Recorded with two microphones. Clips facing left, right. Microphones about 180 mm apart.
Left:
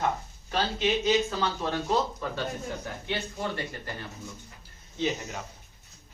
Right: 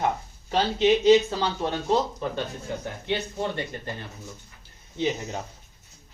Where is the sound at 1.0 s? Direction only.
30° right (ahead or behind).